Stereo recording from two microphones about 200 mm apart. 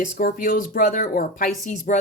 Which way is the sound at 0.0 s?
45° left (ahead or behind).